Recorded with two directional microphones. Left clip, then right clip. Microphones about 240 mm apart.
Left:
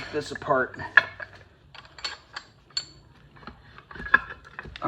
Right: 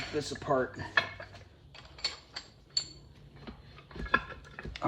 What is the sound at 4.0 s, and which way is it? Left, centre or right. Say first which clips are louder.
Patter: left 9 dB; centre.